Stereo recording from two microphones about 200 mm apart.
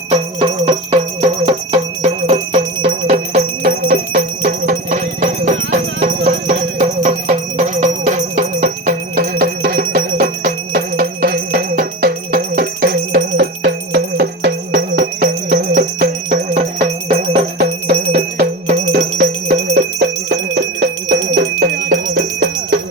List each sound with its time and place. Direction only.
0.9 s music: 25° right (ahead or behind); by 15.6 s 55° right (ahead or behind)
15.7 s music: 40° right (ahead or behind)
17.6 s music: 55° right (ahead or behind)
20.6 s bell: 65° right (ahead or behind)
21.3 s music: 50° right (ahead or behind)